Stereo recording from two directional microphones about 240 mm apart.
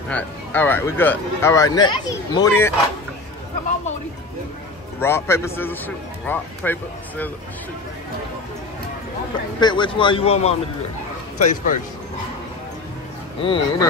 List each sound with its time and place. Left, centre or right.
0.1 s speech: centre
5.0 s speech: centre
9.6 s a man's voice: centre
13.4 s a man's voice: centre